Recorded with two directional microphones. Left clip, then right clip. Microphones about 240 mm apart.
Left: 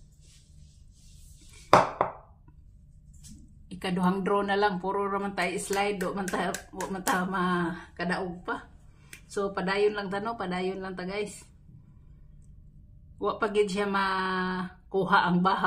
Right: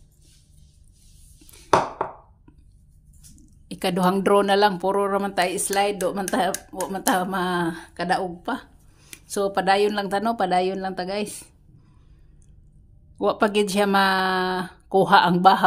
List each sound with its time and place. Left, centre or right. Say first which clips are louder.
3.6 s speech: right 8 dB; right
13.2 s speech: right 6 dB; right